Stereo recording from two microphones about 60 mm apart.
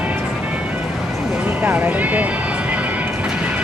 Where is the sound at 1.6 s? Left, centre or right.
Right.